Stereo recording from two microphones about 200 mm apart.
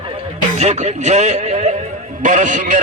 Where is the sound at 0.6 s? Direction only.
35° right (ahead or behind).